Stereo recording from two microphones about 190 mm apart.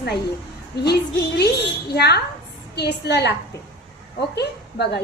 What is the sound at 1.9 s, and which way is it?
A woman's voice, 60° left (ahead or behind).